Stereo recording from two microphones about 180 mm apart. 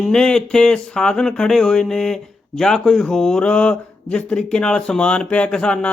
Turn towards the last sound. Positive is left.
turn(degrees=5)  # may be behind; listen again after turning